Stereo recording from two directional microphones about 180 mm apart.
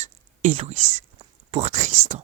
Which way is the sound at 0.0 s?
35° right (ahead or behind).